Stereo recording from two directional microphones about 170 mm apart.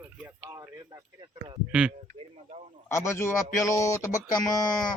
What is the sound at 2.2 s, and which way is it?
Speech, 40° right (ahead or behind).